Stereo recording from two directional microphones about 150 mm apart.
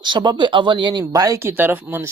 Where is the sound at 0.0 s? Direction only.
30° right (ahead or behind).